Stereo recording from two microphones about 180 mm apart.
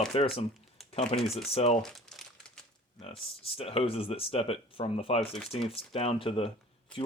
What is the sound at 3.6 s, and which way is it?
Speech, 30° left (ahead or behind).